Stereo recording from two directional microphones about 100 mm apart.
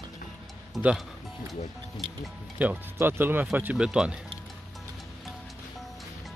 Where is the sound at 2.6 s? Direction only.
20° right (ahead or behind).